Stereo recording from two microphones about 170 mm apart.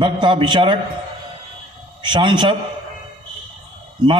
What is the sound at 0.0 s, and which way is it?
Speech, 30° right (ahead or behind).